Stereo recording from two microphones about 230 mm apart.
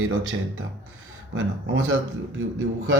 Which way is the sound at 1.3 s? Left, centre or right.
Right.